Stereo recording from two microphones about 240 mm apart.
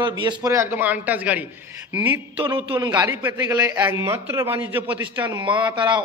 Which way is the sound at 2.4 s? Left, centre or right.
Centre.